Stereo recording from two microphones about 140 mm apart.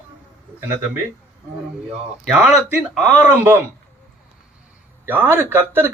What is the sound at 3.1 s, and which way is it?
Speech, 15° right (ahead or behind).